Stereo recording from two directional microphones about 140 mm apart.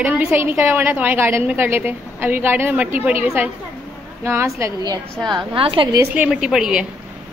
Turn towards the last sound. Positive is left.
turn(degrees=-5)  # may be behind; listen again after turning